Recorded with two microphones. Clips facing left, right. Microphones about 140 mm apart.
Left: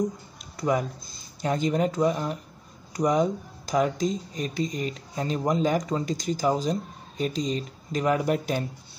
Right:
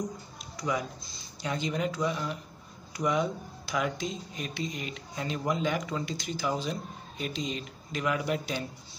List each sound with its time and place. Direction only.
0.6 s speech: 50° left (ahead or behind)